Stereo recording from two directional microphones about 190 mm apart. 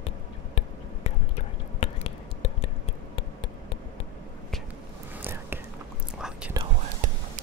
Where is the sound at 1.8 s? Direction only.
30° left (ahead or behind).